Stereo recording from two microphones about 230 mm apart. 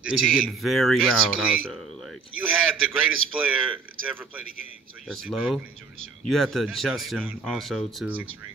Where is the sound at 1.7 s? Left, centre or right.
Centre.